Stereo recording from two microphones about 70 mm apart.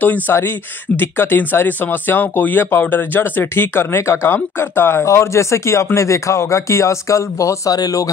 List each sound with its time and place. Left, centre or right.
0.0 s speech: left